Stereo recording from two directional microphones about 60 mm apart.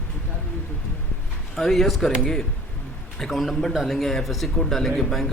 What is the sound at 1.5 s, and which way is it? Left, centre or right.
Speech, centre.